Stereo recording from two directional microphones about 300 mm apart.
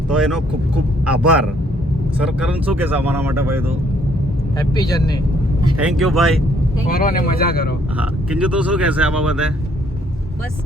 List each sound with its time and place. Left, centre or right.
0.1 s speech: centre
4.7 s speech: centre
5.8 s speech: centre
6.8 s a man's voice: left
7.9 s speech: centre